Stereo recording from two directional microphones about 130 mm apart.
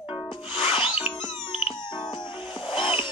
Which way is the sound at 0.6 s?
40° left (ahead or behind).